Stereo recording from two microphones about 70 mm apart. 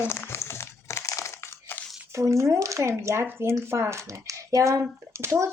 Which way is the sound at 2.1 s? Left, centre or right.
Right.